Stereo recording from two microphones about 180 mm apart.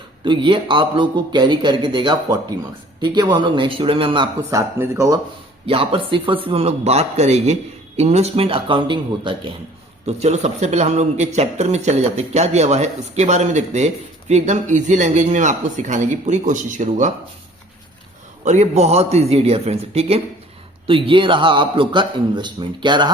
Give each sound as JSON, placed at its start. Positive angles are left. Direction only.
{"t": 0.3, "sound": "a man's voice", "side_deg": -30}
{"t": 4.8, "sound": "speech", "side_deg": -15}
{"t": 5.6, "sound": "speech", "side_deg": -30}
{"t": 10.1, "sound": "speech", "side_deg": -40}
{"t": 18.4, "sound": "a man's voice", "side_deg": -40}